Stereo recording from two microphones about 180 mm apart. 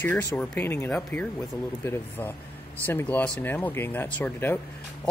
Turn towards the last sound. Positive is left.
turn(degrees=10)  # may be behind; listen again after turning